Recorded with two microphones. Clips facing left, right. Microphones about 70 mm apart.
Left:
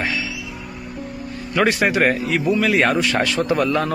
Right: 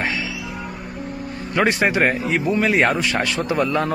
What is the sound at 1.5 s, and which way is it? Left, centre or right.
Speech, right.